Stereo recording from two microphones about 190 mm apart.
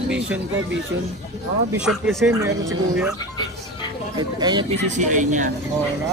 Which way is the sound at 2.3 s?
15° right (ahead or behind).